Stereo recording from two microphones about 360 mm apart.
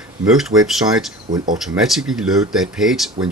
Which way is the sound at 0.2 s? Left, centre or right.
Centre.